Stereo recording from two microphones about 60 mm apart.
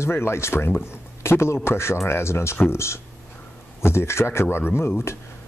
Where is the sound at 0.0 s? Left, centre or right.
Left.